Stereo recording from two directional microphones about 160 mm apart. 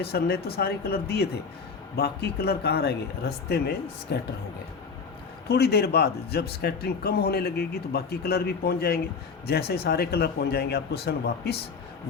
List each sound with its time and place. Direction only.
0.0 s speech: 85° left
5.5 s a man's voice: 90° left